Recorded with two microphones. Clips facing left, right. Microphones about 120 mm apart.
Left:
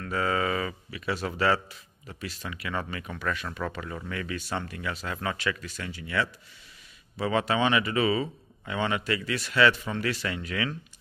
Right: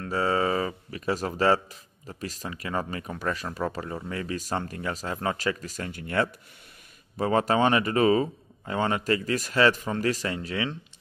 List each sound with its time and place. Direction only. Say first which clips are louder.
0.0 s speech: right 2 dB; 30° right (ahead or behind); by 6.2 s 50° right (ahead or behind)
7.2 s speech: right 3 dB; 40° right (ahead or behind)